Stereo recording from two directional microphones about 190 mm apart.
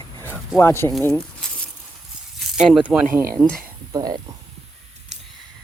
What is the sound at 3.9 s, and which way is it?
Speech, 20° right (ahead or behind).